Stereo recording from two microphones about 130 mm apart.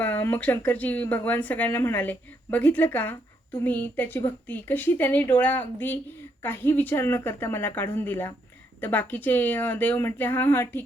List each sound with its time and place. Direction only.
0.0 s speech: 15° left (ahead or behind)